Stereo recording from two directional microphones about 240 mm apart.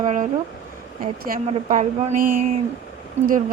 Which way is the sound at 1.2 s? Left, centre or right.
Right.